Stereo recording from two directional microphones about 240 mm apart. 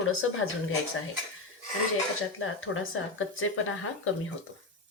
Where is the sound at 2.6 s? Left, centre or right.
Left.